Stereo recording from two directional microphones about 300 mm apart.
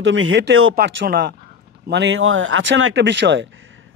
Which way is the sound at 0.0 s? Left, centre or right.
Right.